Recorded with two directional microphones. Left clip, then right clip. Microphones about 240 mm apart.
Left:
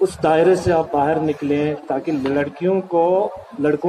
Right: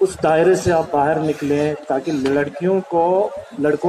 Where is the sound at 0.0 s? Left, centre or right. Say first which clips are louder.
Even; right.